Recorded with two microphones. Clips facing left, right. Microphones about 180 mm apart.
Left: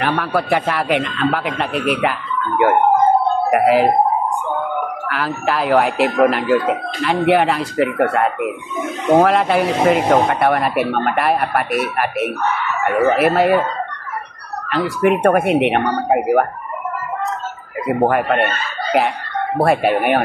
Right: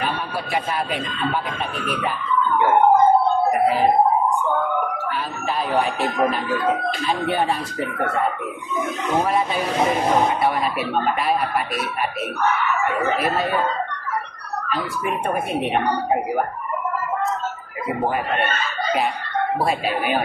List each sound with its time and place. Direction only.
0.0 s speech: 70° left (ahead or behind)
5.0 s speech: 85° left
6.1 s speech: 70° left (ahead or behind)
14.7 s speech: 75° left (ahead or behind)
18.1 s speech: 70° left (ahead or behind)